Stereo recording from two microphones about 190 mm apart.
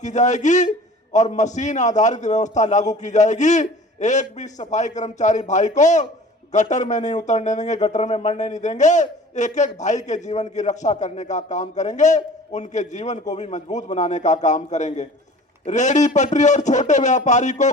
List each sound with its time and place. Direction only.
0.0 s speech: 40° left (ahead or behind)